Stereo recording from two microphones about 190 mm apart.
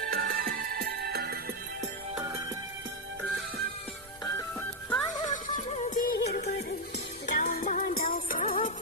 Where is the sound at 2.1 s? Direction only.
15° right (ahead or behind).